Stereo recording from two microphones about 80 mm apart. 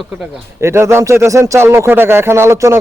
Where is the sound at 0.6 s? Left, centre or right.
Right.